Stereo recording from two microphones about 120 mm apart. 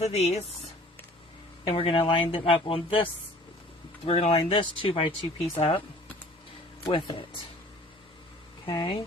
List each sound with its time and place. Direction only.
0.0 s speech: 60° left (ahead or behind)
1.6 s speech: 50° left (ahead or behind)
6.9 s speech: 45° left (ahead or behind)
8.6 s speech: 45° left (ahead or behind)